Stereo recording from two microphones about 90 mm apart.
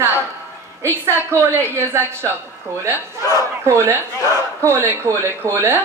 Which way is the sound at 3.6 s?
30° right (ahead or behind).